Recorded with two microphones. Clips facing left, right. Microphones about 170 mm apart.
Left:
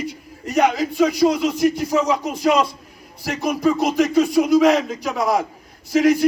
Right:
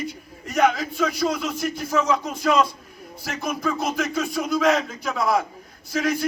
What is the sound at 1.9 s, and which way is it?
Speech, 15° left (ahead or behind).